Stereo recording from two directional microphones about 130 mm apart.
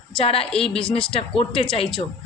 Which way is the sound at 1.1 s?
45° left (ahead or behind).